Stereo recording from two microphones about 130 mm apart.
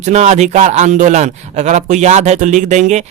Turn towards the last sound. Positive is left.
turn(degrees=-65)  # may be behind; listen again after turning